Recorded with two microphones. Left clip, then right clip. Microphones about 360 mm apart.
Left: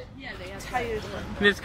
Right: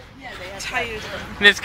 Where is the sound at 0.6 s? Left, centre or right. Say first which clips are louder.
Right 4 dB; centre.